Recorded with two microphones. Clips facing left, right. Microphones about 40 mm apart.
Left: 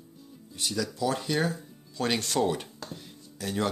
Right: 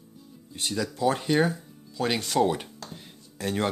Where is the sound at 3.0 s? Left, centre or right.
Right.